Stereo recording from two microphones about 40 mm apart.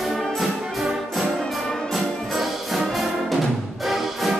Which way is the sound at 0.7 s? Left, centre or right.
Centre.